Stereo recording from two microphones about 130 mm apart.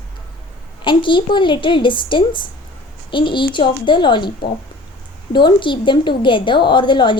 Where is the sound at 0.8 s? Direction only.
40° left (ahead or behind).